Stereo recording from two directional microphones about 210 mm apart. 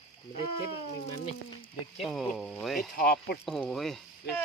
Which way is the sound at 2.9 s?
50° left (ahead or behind).